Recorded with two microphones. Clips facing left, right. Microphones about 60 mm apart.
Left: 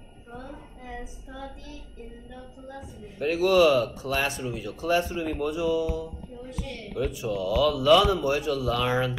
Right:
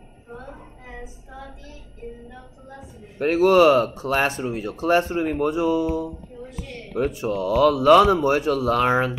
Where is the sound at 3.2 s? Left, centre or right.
Right.